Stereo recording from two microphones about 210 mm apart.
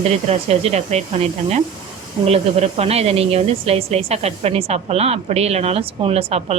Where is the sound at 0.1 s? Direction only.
30° right (ahead or behind).